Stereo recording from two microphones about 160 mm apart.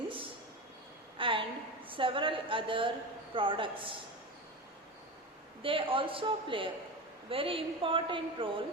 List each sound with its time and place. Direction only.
1.2 s a sound: 30° right (ahead or behind)
1.9 s a woman's voice: 35° right (ahead or behind)
5.6 s a woman's voice: 35° right (ahead or behind)